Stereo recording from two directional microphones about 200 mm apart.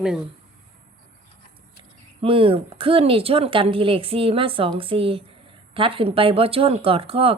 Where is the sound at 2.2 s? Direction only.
25° right (ahead or behind).